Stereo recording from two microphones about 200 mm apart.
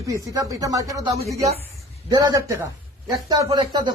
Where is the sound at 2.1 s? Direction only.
20° right (ahead or behind).